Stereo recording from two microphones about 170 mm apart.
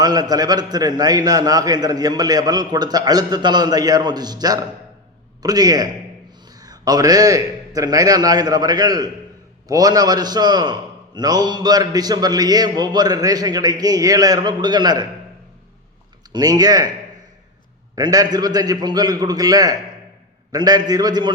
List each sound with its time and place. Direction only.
0.0 s a man's voice: 25° right (ahead or behind)
16.3 s a man's voice: 25° right (ahead or behind)
17.9 s a man's voice: 20° right (ahead or behind)